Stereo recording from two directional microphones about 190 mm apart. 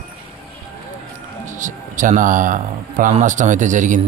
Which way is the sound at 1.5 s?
40° right (ahead or behind).